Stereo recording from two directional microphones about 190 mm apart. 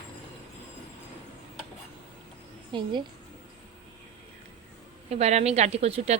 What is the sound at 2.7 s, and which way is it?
Speech, 25° right (ahead or behind).